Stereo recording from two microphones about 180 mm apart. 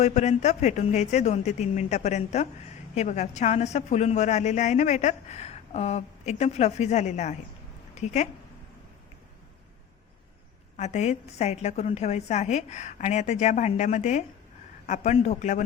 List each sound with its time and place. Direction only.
0.0 s a woman's voice: 40° left (ahead or behind)
10.8 s a woman's voice: 40° left (ahead or behind)